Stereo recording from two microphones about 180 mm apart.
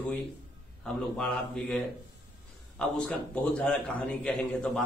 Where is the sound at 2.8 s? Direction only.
5° left (ahead or behind).